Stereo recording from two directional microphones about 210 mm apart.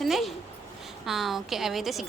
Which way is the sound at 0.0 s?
Centre (ahead or behind).